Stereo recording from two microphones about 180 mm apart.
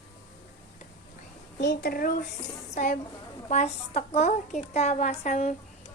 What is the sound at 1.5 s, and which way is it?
A woman's voice, 70° left (ahead or behind).